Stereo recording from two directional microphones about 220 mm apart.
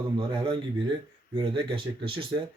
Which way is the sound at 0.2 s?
20° right (ahead or behind).